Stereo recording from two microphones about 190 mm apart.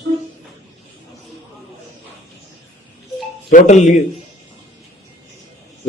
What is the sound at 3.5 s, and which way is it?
Speech, 40° left (ahead or behind).